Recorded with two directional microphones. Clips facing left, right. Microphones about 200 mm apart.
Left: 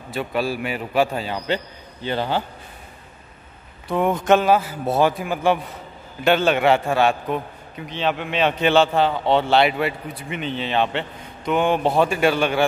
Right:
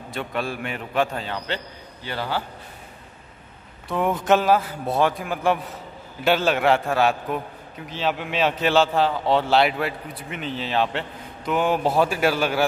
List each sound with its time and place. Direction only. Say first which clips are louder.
0.1 s a man's voice: left 4 dB; 5° left (ahead or behind)
2.0 s a man's voice: left 5 dB; 20° left (ahead or behind)
3.9 s a man's voice: left 3 dB; centre (ahead or behind)